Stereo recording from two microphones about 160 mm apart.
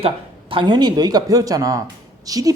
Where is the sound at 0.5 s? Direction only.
30° right (ahead or behind).